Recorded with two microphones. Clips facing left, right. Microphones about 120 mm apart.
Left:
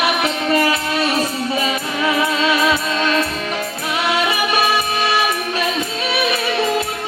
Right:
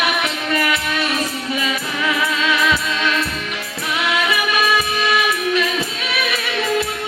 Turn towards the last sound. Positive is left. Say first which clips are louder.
# left 2 dB
turn(degrees=30)  # may be behind; listen again after turning